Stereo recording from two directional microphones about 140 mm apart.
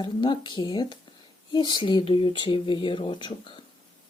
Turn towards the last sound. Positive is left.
turn(degrees=35)  # may be behind; listen again after turning